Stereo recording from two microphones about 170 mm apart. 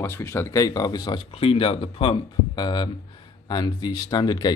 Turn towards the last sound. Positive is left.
turn(degrees=25)  # may be behind; listen again after turning